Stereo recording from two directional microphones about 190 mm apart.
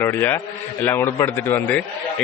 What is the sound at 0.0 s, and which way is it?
A man's voice, 10° left (ahead or behind).